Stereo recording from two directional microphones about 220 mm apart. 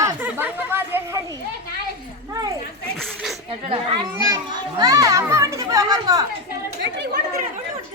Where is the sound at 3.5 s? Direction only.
25° right (ahead or behind).